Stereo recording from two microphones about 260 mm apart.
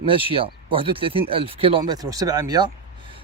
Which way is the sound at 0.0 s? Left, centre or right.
Right.